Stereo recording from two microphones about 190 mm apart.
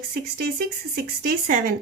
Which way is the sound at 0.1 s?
50° right (ahead or behind).